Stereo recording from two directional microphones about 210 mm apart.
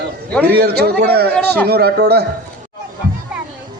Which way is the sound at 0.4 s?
50° right (ahead or behind).